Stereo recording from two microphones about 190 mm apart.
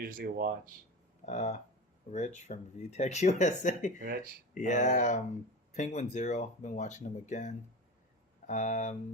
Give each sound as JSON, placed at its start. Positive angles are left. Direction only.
{"t": 0.0, "sound": "speech", "side_deg": -50}
{"t": 1.2, "sound": "speech", "side_deg": 35}